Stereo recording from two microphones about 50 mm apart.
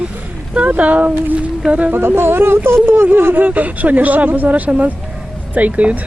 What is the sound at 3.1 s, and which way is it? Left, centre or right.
Speech, right.